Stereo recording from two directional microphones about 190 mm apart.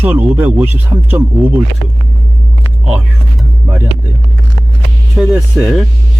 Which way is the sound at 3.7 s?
10° right (ahead or behind).